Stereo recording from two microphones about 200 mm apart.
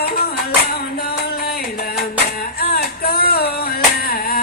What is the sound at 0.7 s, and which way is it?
Music, 50° left (ahead or behind).